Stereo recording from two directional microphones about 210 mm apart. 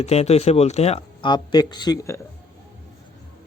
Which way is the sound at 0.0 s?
30° left (ahead or behind).